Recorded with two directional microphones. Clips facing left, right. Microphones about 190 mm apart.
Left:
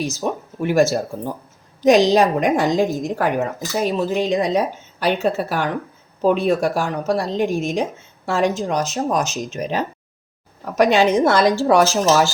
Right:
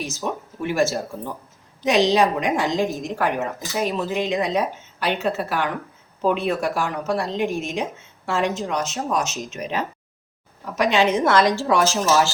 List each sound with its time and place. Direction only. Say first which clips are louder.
0.2 s speech: left 4 dB; 40° left (ahead or behind)